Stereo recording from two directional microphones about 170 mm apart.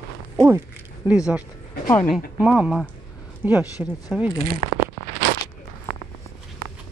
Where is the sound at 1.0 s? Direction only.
5° right (ahead or behind).